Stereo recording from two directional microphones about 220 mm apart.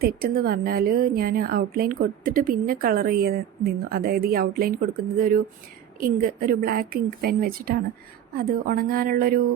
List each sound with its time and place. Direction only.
0.0 s a woman's voice: 45° right (ahead or behind)